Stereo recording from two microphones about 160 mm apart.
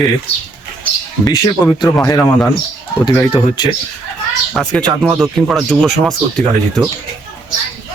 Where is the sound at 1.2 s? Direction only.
25° left (ahead or behind).